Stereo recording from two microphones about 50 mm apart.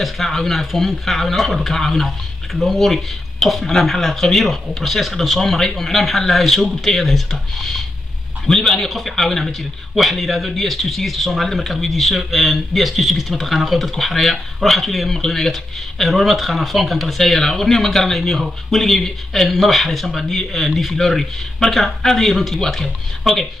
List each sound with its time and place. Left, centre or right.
0.0 s a man's voice: centre